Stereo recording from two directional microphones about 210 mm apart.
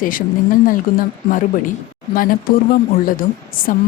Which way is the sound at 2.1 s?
40° left (ahead or behind).